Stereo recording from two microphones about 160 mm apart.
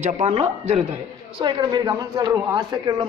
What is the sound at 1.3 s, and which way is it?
A man's voice, 30° right (ahead or behind).